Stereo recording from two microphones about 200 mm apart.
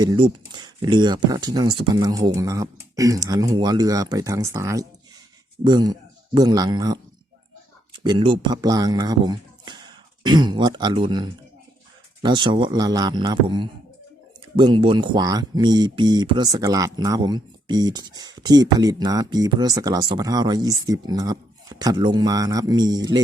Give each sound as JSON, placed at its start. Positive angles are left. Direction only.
{"t": 0.0, "sound": "speech", "side_deg": -20}